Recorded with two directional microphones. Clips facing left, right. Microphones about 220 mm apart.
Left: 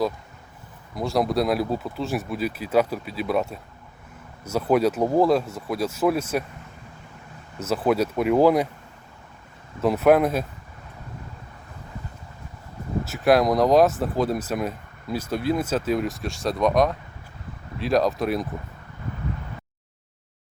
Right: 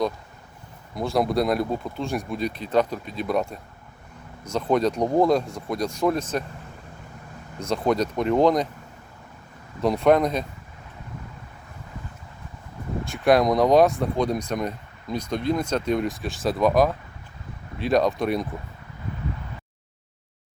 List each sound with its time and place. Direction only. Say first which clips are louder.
0.9 s speech: even; centre (ahead or behind)
7.6 s speech: left 1 dB; 5° left (ahead or behind)
9.8 s speech: left 1 dB; 5° left (ahead or behind)
13.1 s speech: even; centre (ahead or behind)